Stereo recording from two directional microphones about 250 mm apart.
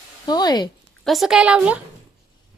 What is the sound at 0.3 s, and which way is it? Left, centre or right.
Speech, centre.